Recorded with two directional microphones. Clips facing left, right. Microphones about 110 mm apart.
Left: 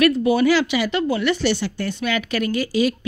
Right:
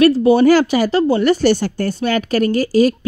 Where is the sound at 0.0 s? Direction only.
30° right (ahead or behind).